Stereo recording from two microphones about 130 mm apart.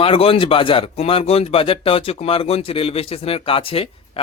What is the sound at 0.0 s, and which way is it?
A man's voice, 45° left (ahead or behind).